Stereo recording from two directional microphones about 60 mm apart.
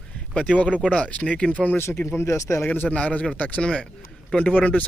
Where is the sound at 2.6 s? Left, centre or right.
Left.